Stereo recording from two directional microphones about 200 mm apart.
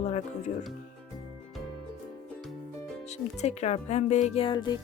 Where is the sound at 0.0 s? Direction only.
35° left (ahead or behind).